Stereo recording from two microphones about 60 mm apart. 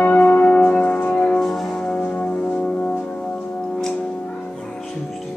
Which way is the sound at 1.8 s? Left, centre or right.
Left.